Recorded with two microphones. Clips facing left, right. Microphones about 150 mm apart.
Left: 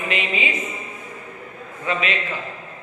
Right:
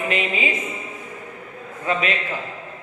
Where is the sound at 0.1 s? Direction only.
40° right (ahead or behind).